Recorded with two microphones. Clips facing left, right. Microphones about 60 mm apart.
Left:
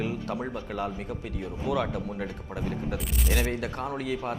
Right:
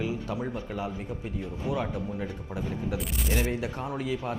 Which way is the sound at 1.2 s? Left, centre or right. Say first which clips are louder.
Even; left.